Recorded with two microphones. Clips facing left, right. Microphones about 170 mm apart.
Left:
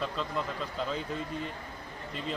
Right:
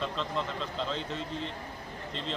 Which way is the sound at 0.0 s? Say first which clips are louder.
Even; 5° left (ahead or behind).